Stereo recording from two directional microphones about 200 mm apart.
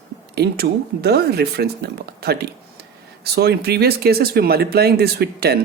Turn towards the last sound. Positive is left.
turn(degrees=-55)  # may be behind; listen again after turning